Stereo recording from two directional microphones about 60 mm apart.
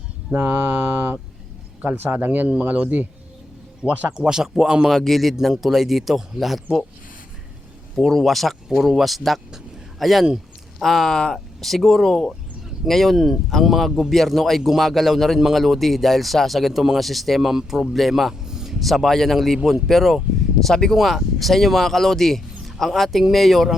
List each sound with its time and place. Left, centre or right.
0.3 s speech: right
1.8 s speech: right
4.3 s speech: centre
4.9 s a man's voice: centre
7.9 s a man's voice: centre
10.2 s a sound: centre
10.8 s a man's voice: centre
20.9 s a man's voice: centre